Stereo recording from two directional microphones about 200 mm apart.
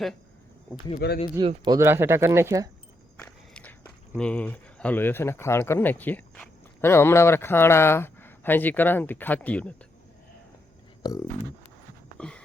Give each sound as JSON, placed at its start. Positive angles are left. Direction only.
{"t": 0.9, "sound": "speech", "side_deg": 50}
{"t": 1.4, "sound": "speech", "side_deg": -20}
{"t": 3.2, "sound": "walk", "side_deg": 5}
{"t": 4.2, "sound": "speech", "side_deg": 5}
{"t": 12.1, "sound": "a sound", "side_deg": 5}